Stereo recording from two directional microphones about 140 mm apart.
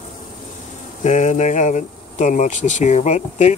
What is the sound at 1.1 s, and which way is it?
Speech, 60° left (ahead or behind).